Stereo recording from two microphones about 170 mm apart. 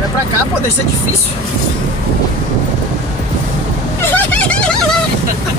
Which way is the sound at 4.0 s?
10° left (ahead or behind).